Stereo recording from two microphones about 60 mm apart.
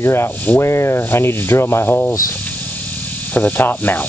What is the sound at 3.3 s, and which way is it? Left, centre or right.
Cricket, left.